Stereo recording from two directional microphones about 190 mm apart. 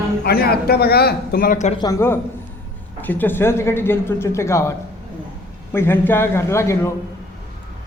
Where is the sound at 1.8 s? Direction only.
15° left (ahead or behind).